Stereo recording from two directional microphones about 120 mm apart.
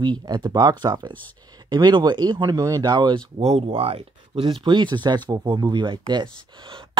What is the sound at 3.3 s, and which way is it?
Speech, 60° right (ahead or behind).